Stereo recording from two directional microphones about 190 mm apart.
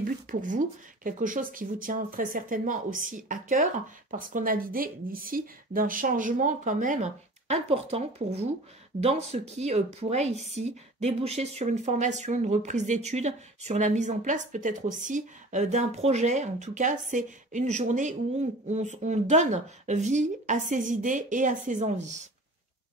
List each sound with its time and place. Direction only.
0.0 s speech: 45° right (ahead or behind)